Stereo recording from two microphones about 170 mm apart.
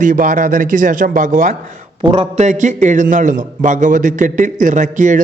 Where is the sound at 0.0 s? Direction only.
50° right (ahead or behind).